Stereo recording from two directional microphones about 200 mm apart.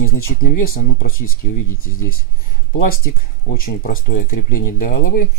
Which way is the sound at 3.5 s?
45° left (ahead or behind).